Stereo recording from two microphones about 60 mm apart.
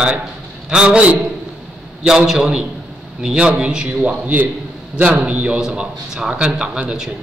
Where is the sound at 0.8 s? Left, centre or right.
Right.